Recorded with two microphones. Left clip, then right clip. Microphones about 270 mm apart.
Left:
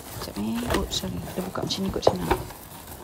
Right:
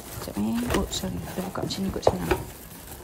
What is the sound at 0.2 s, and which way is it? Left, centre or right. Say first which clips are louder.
A woman's voice: right 1 dB; centre.